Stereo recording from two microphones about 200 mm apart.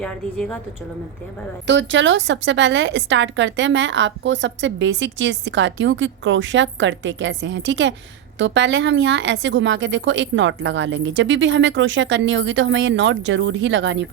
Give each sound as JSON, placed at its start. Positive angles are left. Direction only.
{"t": 0.0, "sound": "a woman's voice", "side_deg": 5}
{"t": 1.6, "sound": "a woman's voice", "side_deg": -65}